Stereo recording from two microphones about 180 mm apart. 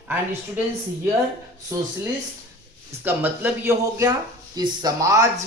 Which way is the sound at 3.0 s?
10° right (ahead or behind).